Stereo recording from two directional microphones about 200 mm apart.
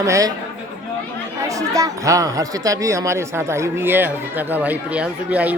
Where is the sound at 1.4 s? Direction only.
15° right (ahead or behind).